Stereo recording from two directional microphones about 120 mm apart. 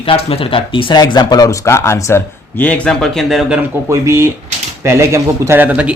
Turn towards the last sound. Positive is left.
turn(degrees=-15)  # may be behind; listen again after turning